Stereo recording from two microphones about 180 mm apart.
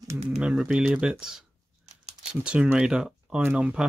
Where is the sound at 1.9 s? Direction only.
40° right (ahead or behind).